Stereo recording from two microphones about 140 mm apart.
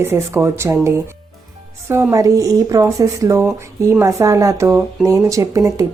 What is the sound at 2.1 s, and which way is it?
A woman's voice, 25° right (ahead or behind).